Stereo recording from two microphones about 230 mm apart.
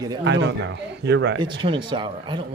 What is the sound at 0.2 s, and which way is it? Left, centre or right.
Speech, right.